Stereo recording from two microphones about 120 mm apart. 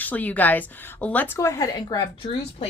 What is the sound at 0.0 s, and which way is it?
Speech, 15° left (ahead or behind).